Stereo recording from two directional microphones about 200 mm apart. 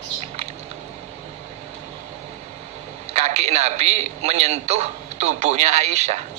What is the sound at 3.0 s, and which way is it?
A man's voice, 35° right (ahead or behind).